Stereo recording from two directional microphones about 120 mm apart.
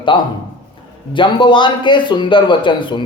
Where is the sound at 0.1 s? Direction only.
45° left (ahead or behind).